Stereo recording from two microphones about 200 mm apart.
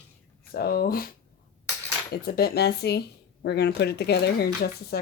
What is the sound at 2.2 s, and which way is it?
Speech, 50° left (ahead or behind).